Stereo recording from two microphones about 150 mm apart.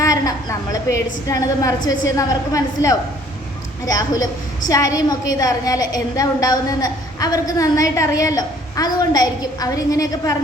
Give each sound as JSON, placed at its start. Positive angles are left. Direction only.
{"t": 0.0, "sound": "a woman's voice", "side_deg": 25}